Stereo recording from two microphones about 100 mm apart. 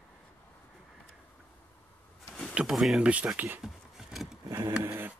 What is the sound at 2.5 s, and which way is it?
Speech, 5° right (ahead or behind).